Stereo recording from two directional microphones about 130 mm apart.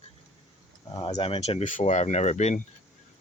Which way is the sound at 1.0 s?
45° left (ahead or behind).